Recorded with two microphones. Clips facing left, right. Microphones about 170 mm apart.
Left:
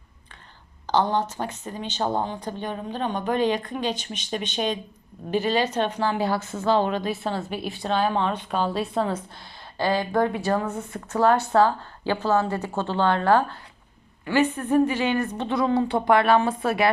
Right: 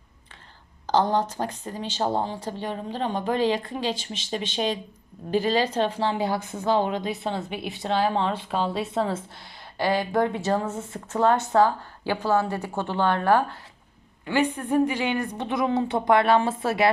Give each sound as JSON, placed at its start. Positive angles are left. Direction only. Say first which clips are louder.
{"t": 0.9, "sound": "a woman's voice", "louder": "right 1 dB", "side_deg": -40}